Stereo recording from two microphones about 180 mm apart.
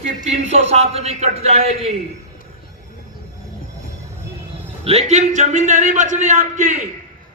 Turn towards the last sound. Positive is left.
turn(degrees=-45)  # may be behind; listen again after turning